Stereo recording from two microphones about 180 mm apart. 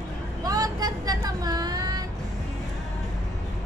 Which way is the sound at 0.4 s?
20° right (ahead or behind).